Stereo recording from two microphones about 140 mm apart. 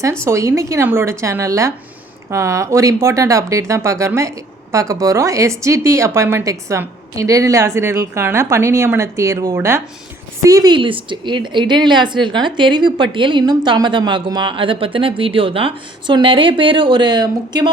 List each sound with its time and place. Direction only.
0.3 s a woman's voice: 20° right (ahead or behind)